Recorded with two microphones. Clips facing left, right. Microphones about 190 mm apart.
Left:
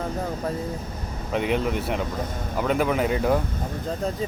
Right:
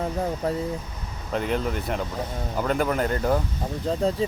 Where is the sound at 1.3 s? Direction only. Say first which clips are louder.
Left 2 dB; centre (ahead or behind).